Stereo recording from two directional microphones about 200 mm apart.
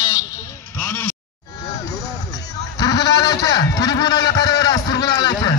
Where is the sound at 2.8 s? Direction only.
20° left (ahead or behind).